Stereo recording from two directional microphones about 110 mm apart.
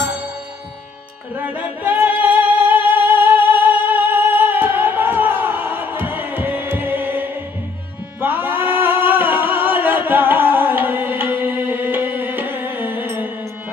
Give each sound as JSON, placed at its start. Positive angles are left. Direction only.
{"t": 1.4, "sound": "music", "side_deg": -15}